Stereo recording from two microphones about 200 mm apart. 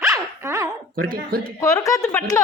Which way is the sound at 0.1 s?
15° right (ahead or behind).